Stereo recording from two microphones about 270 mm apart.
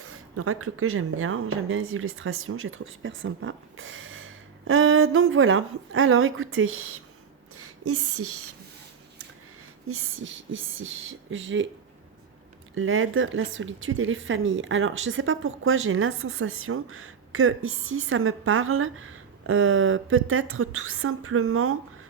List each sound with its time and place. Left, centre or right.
0.0 s speech: right
7.5 s a sound: right
9.8 s speech: right
12.7 s speech: right